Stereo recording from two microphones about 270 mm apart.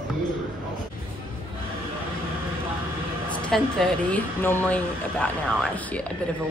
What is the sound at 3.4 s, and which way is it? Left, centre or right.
Speech, centre.